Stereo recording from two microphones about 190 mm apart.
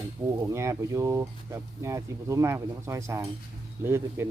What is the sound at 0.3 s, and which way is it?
Speech, 15° right (ahead or behind).